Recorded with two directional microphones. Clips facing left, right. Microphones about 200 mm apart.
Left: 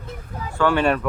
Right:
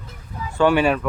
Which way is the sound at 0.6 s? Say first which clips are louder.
Right 3 dB; 15° right (ahead or behind).